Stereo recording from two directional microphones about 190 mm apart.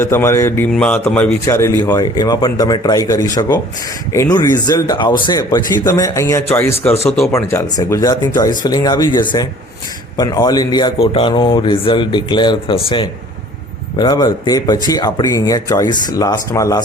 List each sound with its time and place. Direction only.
0.0 s a man's voice: 15° left (ahead or behind)